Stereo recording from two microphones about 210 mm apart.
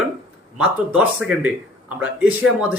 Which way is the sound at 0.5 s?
5° right (ahead or behind).